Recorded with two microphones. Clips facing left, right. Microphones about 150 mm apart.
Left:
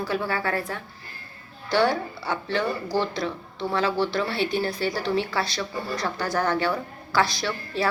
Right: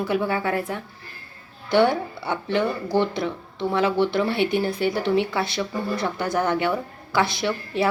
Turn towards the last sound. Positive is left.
turn(degrees=-20)  # may be behind; listen again after turning